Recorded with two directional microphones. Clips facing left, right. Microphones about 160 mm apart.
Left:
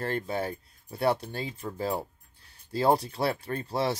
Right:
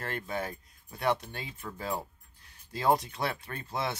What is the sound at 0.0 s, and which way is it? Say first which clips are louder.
Speech: left 5 dB; 30° left (ahead or behind).